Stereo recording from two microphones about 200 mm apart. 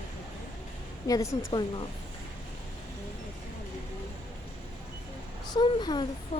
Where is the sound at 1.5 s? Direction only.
20° left (ahead or behind).